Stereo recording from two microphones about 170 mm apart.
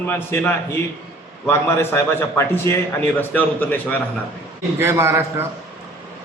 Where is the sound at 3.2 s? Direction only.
10° left (ahead or behind).